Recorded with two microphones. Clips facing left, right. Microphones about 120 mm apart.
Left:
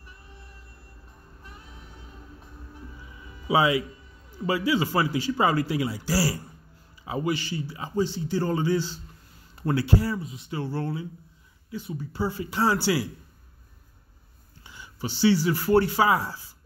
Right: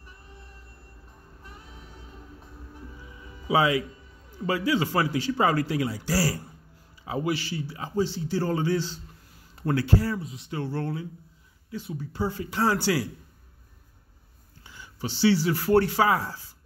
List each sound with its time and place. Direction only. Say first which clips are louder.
3.4 s a man's voice: left 1 dB; 10° left (ahead or behind)
10.1 s a man's voice: even; centre (ahead or behind)
14.6 s a sound: left 1 dB; 15° left (ahead or behind)
15.0 s a man's voice: left 1 dB; centre (ahead or behind)